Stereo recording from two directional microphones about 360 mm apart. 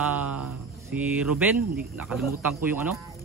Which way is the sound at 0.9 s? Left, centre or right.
Centre.